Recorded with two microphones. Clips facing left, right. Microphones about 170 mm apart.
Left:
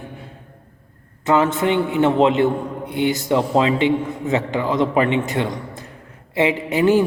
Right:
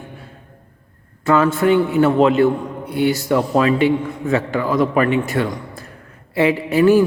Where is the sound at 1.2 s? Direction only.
20° left (ahead or behind).